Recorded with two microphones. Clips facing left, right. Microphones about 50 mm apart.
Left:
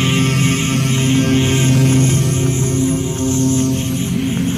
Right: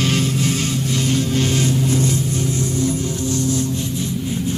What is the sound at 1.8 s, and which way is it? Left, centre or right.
Music, left.